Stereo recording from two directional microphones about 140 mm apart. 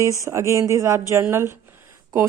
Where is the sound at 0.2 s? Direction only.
20° right (ahead or behind).